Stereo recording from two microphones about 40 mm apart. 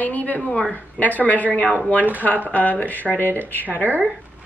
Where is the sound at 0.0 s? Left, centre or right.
Left.